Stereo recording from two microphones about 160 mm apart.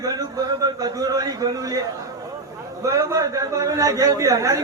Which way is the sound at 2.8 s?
20° right (ahead or behind).